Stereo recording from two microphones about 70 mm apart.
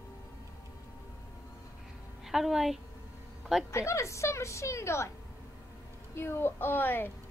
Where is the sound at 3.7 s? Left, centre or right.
Left.